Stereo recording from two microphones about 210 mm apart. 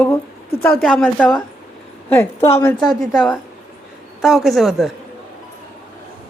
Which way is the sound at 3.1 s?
Centre (ahead or behind).